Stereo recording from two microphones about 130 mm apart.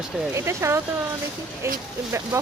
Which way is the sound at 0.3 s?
20° right (ahead or behind).